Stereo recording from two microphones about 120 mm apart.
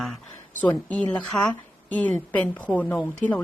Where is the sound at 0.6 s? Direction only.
15° left (ahead or behind).